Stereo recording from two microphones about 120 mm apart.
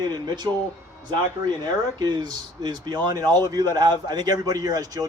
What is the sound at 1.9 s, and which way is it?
Speech, 35° right (ahead or behind).